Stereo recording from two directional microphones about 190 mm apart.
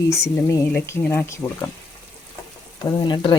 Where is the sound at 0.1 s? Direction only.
15° left (ahead or behind).